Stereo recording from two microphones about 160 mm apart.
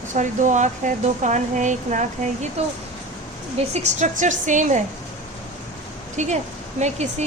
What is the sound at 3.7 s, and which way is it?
Speech, 45° right (ahead or behind).